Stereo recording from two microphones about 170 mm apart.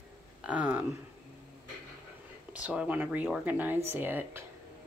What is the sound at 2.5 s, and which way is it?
Speech, 5° right (ahead or behind).